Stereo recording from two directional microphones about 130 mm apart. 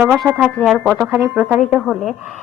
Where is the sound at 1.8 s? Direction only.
Centre (ahead or behind).